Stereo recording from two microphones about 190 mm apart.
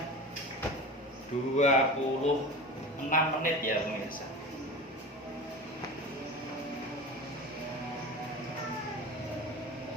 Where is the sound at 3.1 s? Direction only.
45° left (ahead or behind).